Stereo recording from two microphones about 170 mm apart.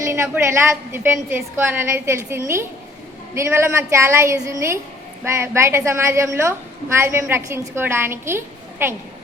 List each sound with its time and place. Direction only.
0.0 s a woman's voice: 15° right (ahead or behind)